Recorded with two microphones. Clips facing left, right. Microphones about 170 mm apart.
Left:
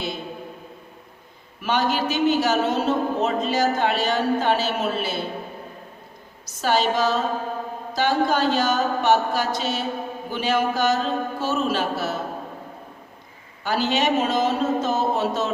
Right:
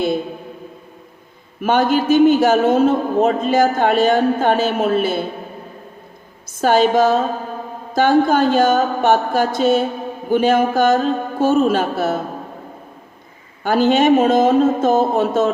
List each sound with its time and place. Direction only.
1.6 s a man's voice: 50° right (ahead or behind)
6.5 s a man's voice: 50° right (ahead or behind)
13.7 s a man's voice: 50° right (ahead or behind)